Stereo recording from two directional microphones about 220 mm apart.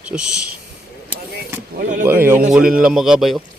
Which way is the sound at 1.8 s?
35° right (ahead or behind).